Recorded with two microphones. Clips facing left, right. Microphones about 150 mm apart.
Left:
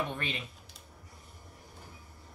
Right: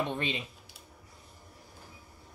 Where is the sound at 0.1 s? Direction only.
20° right (ahead or behind).